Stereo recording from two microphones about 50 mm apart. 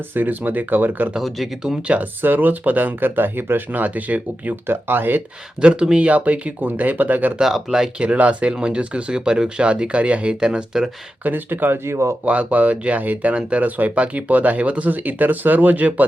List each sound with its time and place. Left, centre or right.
0.1 s speech: right
4.6 s speech: right
5.5 s speech: centre
6.7 s speech: right
7.7 s speech: centre
11.2 s speech: right
11.9 s speech: right
12.2 s speech: right